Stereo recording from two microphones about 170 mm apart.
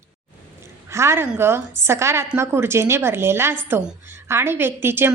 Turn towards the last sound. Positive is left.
turn(degrees=-15)  # may be behind; listen again after turning